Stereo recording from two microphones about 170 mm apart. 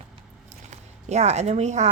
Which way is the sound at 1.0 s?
40° right (ahead or behind).